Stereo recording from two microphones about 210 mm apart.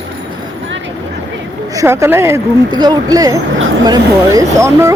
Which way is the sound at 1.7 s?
15° right (ahead or behind).